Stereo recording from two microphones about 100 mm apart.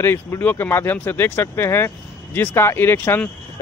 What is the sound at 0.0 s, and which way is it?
Speech, 25° left (ahead or behind).